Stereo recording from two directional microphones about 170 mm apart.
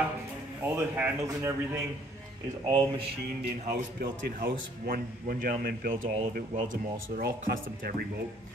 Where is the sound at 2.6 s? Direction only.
30° right (ahead or behind).